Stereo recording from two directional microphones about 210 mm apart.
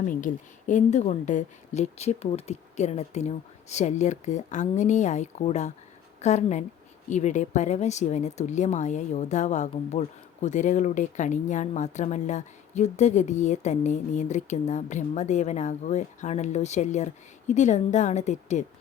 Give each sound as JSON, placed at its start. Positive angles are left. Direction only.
{"t": 0.1, "sound": "speech", "side_deg": 40}